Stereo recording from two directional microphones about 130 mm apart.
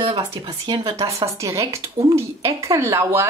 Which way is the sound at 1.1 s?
25° right (ahead or behind).